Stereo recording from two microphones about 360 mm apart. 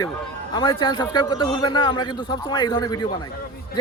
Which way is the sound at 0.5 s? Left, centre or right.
Centre.